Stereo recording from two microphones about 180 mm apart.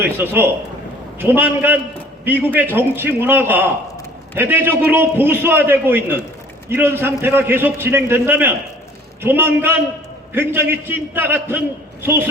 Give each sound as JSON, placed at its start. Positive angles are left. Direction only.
{"t": 0.0, "sound": "a man's voice", "side_deg": -10}